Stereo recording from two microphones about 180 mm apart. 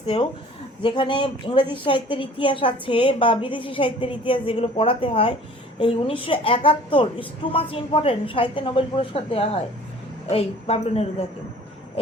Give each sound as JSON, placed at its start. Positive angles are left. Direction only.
{"t": 0.0, "sound": "a woman's voice", "side_deg": 30}